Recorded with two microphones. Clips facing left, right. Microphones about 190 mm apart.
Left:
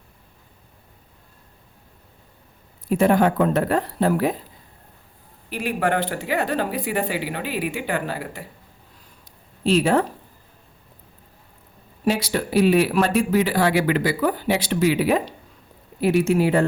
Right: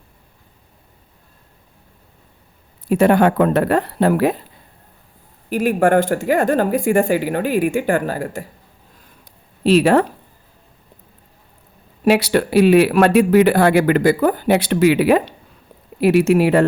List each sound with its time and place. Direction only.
2.8 s speech: 70° right (ahead or behind)
5.5 s speech: 45° right (ahead or behind)
9.6 s speech: 70° right (ahead or behind)
12.0 s speech: 70° right (ahead or behind)